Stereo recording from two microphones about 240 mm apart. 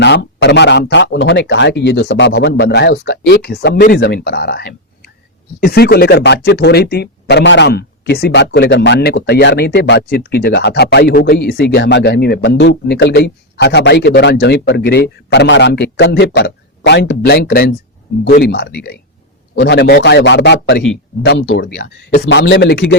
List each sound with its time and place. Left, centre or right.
0.0 s speech: left
21.8 s speech: left